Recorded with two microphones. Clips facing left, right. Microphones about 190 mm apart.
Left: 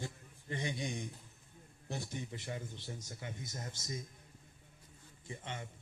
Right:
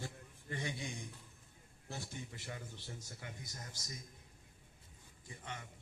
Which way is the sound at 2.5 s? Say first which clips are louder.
Left 5 dB; 20° left (ahead or behind).